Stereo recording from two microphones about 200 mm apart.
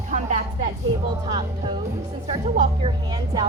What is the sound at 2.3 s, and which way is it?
A woman's voice, 25° right (ahead or behind).